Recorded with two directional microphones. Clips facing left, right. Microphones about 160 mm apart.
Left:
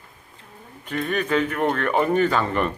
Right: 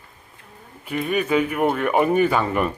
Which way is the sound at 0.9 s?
10° right (ahead or behind).